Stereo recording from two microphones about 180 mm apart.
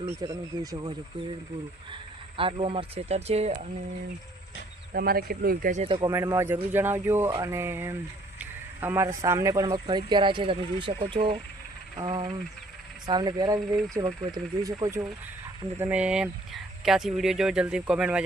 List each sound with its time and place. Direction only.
0.0 s speech: 15° right (ahead or behind); by 3.7 s 40° right (ahead or behind)
4.9 s a man's voice: 55° right (ahead or behind)
5.7 s speech: 35° right (ahead or behind)
6.0 s speech: 20° right (ahead or behind)
15.8 s speech: 5° right (ahead or behind)